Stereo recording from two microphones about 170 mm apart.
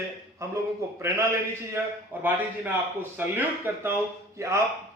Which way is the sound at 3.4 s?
15° right (ahead or behind).